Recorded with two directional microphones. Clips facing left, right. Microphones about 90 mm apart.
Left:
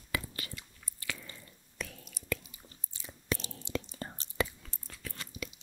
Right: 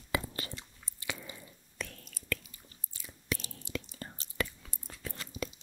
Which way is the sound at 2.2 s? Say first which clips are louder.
Left 1 dB; 20° left (ahead or behind).